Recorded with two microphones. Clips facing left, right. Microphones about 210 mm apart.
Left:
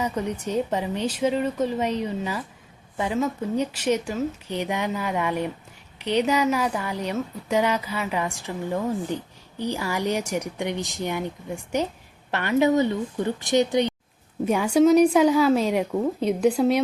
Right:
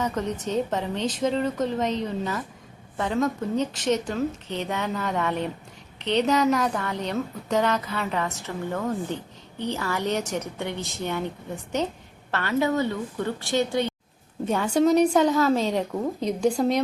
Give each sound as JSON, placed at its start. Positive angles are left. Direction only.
{"t": 0.0, "sound": "a woman's voice", "side_deg": 10}